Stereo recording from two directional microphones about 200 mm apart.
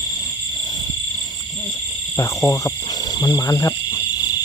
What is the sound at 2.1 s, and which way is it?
Speech, 15° left (ahead or behind).